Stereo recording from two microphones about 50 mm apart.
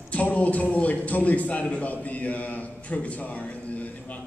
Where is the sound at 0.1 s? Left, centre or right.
Left.